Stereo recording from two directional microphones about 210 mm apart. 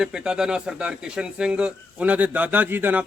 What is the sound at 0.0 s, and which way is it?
A man's voice, 5° right (ahead or behind).